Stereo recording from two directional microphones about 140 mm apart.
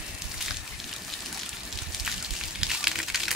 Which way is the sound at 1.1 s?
Centre (ahead or behind).